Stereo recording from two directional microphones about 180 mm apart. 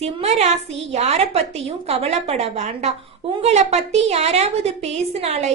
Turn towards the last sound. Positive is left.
turn(degrees=-35)  # may be behind; listen again after turning